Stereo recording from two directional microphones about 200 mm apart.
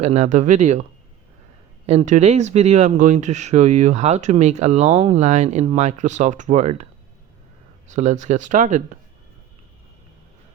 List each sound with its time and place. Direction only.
0.0 s speech: 35° right (ahead or behind)
1.9 s speech: 35° right (ahead or behind)
7.9 s speech: 35° right (ahead or behind)